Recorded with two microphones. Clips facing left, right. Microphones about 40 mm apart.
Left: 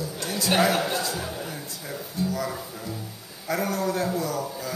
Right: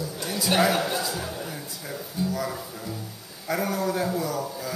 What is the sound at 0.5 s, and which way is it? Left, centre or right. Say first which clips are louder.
Speech: even; centre.